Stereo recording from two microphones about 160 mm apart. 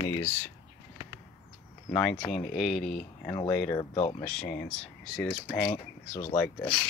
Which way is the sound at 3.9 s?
35° left (ahead or behind).